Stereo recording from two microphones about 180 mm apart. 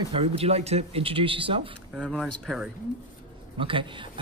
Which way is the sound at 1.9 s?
5° right (ahead or behind).